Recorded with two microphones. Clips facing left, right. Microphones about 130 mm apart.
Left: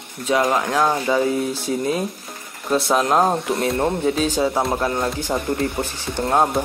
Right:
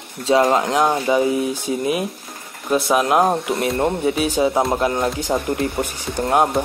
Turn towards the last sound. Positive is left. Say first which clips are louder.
# right 1 dB
turn(degrees=-15)  # may be behind; listen again after turning